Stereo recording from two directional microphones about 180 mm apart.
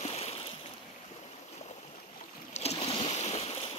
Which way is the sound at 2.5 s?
35° left (ahead or behind).